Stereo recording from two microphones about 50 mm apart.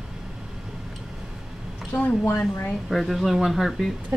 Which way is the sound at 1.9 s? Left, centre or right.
Left.